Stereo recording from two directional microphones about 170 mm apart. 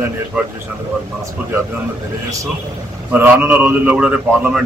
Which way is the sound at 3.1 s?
10° right (ahead or behind).